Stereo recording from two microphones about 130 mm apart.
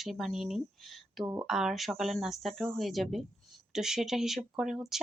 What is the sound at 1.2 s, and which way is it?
Speech, 30° right (ahead or behind).